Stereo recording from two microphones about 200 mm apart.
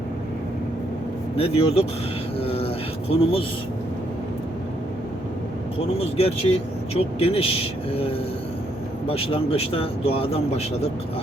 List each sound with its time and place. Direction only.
1.4 s speech: 30° left (ahead or behind)
2.4 s a sound: 30° left (ahead or behind)
6.0 s speech: 30° left (ahead or behind)